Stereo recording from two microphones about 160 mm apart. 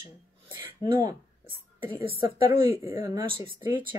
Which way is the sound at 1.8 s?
15° right (ahead or behind).